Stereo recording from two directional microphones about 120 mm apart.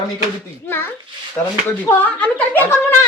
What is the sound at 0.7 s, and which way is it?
Speech, 20° left (ahead or behind).